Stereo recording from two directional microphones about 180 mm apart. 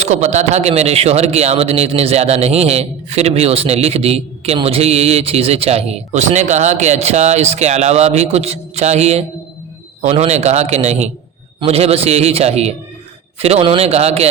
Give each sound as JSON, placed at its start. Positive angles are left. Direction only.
{"t": 0.0, "sound": "speech", "side_deg": -40}